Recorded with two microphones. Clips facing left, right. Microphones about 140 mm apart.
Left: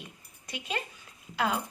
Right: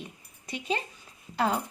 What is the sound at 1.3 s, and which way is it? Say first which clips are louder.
Speech: right 2 dB; 35° right (ahead or behind).